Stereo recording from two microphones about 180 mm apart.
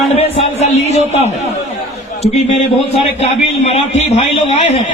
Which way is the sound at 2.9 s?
35° left (ahead or behind).